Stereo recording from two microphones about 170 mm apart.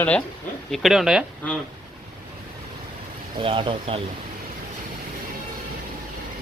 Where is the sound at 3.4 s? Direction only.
30° right (ahead or behind).